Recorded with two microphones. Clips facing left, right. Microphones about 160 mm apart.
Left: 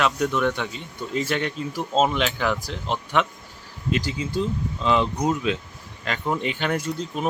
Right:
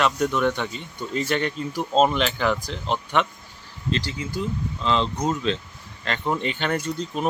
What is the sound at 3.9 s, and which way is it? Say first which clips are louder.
Speech: left 3 dB; 15° left (ahead or behind).